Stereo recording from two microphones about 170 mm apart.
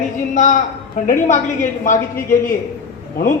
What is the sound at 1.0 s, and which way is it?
A woman's voice, 50° left (ahead or behind).